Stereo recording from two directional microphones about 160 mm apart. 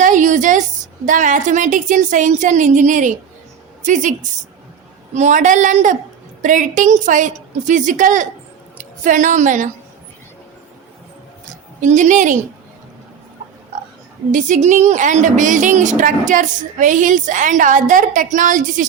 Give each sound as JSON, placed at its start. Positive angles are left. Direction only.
{"t": 0.0, "sound": "a sound", "side_deg": -50}
{"t": 1.0, "sound": "a woman's voice", "side_deg": -55}
{"t": 11.8, "sound": "a woman's voice", "side_deg": -50}
{"t": 14.3, "sound": "a woman's voice", "side_deg": -50}